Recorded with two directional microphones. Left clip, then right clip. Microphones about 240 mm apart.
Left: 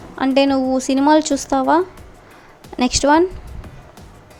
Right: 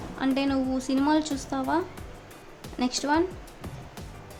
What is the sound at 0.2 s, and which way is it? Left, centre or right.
A woman's voice, left.